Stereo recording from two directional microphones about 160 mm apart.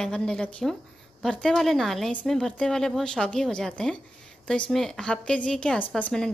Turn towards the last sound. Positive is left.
turn(degrees=5)  # may be behind; listen again after turning